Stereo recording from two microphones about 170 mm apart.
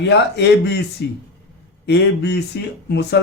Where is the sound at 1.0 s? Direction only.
70° left (ahead or behind).